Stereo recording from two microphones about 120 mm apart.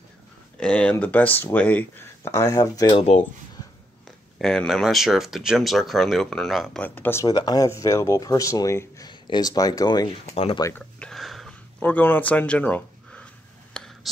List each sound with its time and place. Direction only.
0.6 s speech: 10° left (ahead or behind); by 2.9 s 30° left (ahead or behind)
2.9 s speech: 55° left (ahead or behind)
4.4 s speech: 5° left (ahead or behind)
6.8 s speech: 15° left (ahead or behind)
7.2 s speech: 35° left (ahead or behind)
10.2 s speech: 55° left (ahead or behind)
11.0 s a sound: 5° left (ahead or behind)
11.8 s speech: 15° left (ahead or behind)
13.7 s a sound: 5° left (ahead or behind)